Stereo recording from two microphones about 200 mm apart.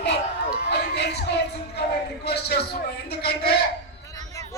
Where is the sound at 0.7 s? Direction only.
55° left (ahead or behind).